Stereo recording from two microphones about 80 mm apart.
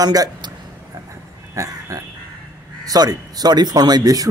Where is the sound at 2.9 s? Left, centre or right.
Right.